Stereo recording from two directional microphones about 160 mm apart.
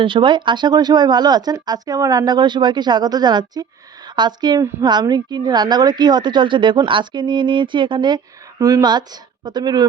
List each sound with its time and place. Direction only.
0.0 s a woman's voice: 30° right (ahead or behind)